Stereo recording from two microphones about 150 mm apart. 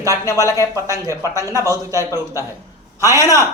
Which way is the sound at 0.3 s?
20° left (ahead or behind).